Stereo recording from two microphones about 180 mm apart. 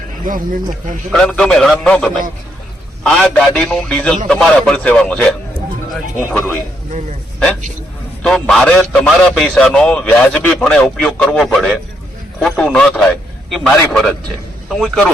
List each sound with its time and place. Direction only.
0.3 s speech: 50° right (ahead or behind)
1.1 s a man's voice: 5° left (ahead or behind)
8.2 s a man's voice: centre (ahead or behind)